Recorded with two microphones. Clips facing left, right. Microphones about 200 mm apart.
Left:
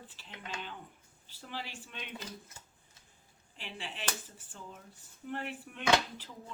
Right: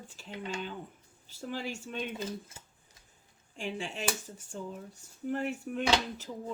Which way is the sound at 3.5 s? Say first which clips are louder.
Right 8 dB; 45° right (ahead or behind).